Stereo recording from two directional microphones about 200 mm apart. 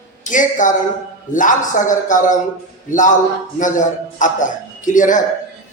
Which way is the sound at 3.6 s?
40° left (ahead or behind).